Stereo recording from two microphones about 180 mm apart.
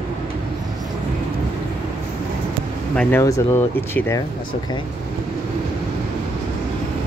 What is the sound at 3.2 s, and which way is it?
Speech, 15° left (ahead or behind).